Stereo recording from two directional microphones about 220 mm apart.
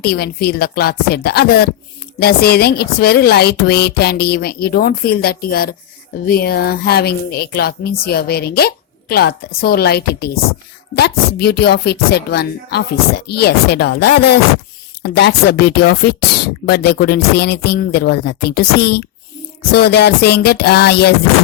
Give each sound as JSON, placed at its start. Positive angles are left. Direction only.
{"t": 0.0, "sound": "speech", "side_deg": 45}